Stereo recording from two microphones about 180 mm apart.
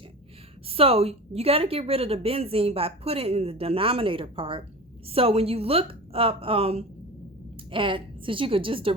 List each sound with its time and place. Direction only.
0.7 s a woman's voice: 30° right (ahead or behind)